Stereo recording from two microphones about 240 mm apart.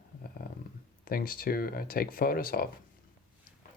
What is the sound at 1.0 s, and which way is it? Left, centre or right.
Speech, left.